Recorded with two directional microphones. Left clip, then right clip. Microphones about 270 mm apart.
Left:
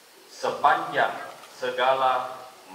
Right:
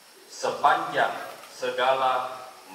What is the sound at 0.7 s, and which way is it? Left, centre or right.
A man's voice, centre.